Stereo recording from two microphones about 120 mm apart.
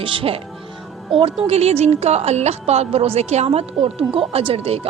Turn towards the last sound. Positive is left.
turn(degrees=-55)  # may be behind; listen again after turning